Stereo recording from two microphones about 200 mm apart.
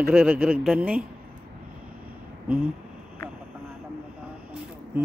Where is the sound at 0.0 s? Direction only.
10° right (ahead or behind).